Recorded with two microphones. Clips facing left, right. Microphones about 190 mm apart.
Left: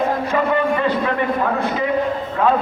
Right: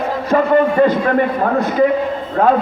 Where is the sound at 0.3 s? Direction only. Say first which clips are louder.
Right 9 dB; 45° right (ahead or behind).